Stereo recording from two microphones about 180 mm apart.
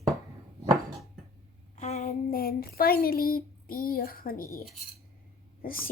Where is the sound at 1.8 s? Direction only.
40° left (ahead or behind).